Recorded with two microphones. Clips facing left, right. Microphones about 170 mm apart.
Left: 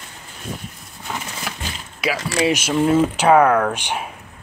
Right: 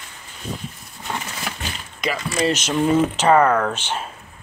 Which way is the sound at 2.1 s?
80° left.